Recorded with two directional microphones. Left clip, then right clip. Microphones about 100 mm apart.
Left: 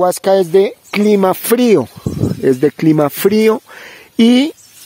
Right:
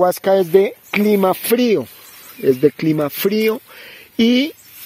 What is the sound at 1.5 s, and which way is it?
Speech, 65° left (ahead or behind).